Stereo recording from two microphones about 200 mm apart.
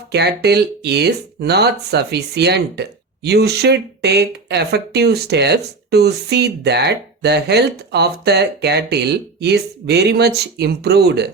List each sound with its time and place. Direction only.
0.1 s speech: 55° right (ahead or behind)